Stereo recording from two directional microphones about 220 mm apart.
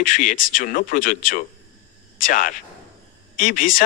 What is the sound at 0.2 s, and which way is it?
A man's voice, 35° left (ahead or behind).